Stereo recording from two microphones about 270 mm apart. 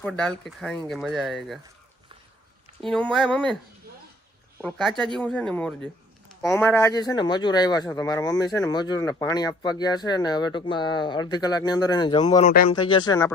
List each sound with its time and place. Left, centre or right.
0.0 s speech: centre
2.8 s speech: centre
4.6 s speech: centre
12.5 s speech: left
12.7 s speech: centre